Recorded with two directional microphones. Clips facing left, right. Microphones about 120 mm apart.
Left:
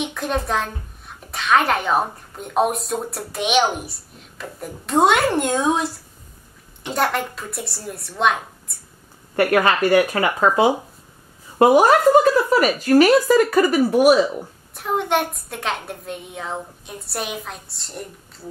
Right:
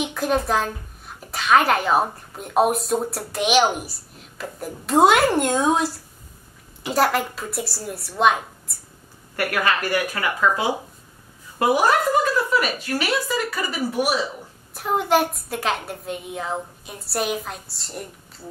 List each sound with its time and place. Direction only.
0.0 s a child's voice: centre (ahead or behind)
9.4 s a woman's voice: 30° left (ahead or behind); by 14.1 s 50° left (ahead or behind)
14.7 s a child's voice: centre (ahead or behind)